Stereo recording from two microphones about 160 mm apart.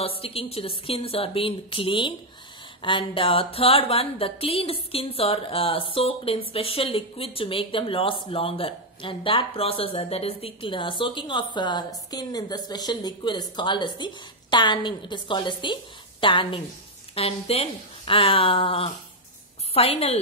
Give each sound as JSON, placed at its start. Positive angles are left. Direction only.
{"t": 0.0, "sound": "speech", "side_deg": 35}